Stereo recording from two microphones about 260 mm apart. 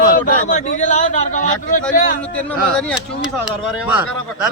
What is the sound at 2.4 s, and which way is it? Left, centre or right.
Speech, centre.